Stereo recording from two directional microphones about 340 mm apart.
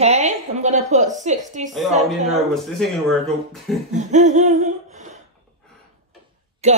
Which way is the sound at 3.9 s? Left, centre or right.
Right.